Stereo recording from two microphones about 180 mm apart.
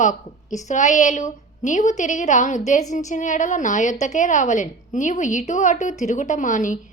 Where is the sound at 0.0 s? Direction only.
45° left (ahead or behind).